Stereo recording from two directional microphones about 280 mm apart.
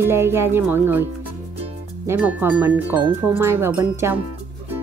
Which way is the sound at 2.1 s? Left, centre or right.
Centre.